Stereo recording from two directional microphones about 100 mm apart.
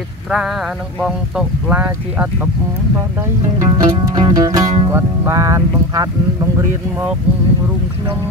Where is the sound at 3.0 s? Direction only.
30° right (ahead or behind).